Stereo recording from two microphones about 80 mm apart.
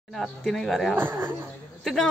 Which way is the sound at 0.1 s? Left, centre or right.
Centre.